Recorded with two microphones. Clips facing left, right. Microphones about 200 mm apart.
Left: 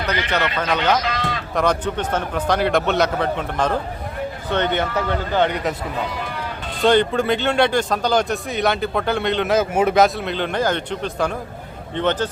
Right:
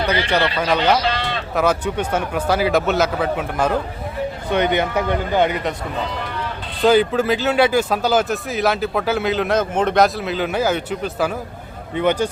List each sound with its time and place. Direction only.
0.2 s speech: 30° right (ahead or behind)
1.0 s sheep: 30° right (ahead or behind)
1.5 s speech: 5° right (ahead or behind)
6.8 s speech: 5° right (ahead or behind)